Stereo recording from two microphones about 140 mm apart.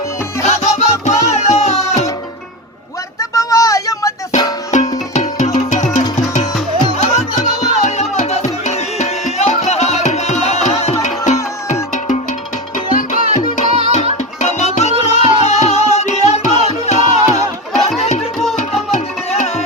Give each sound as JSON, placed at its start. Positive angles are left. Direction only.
{"t": 0.4, "sound": "music", "side_deg": 50}
{"t": 3.2, "sound": "vehicle", "side_deg": 25}
{"t": 4.3, "sound": "music", "side_deg": 60}
{"t": 12.7, "sound": "music", "side_deg": 70}
{"t": 18.9, "sound": "tabla", "side_deg": 60}